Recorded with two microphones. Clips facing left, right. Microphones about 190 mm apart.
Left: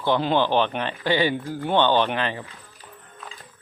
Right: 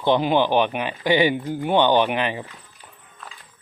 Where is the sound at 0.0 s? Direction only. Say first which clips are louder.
Right 2 dB; 15° right (ahead or behind).